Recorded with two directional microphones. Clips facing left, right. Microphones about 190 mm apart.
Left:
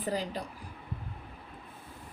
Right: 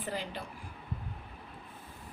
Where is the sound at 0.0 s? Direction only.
35° left (ahead or behind).